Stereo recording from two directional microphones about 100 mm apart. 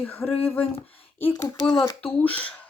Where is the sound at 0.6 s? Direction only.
70° left (ahead or behind).